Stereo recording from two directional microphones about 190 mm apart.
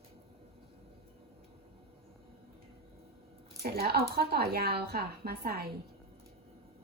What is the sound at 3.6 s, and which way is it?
Speech, 55° right (ahead or behind).